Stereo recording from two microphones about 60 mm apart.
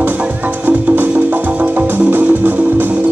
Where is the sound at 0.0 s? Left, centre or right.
Right.